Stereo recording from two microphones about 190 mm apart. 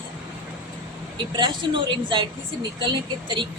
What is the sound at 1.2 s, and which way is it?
A woman's voice, 25° right (ahead or behind).